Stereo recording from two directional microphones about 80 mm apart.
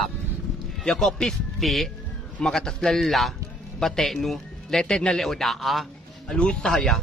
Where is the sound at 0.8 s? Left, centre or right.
Centre.